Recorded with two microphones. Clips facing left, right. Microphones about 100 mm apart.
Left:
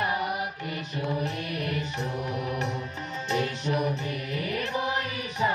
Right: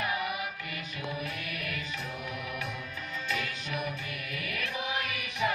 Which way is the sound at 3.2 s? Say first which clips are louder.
Left 9 dB; 40° left (ahead or behind).